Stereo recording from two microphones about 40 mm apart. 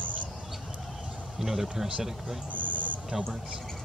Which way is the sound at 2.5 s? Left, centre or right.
Right.